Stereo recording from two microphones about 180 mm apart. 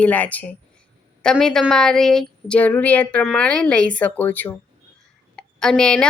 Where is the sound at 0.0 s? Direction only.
10° left (ahead or behind).